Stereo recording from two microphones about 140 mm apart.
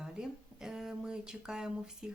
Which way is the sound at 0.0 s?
5° right (ahead or behind).